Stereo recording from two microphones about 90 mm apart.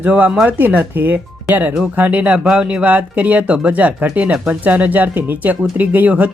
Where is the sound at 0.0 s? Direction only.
15° right (ahead or behind).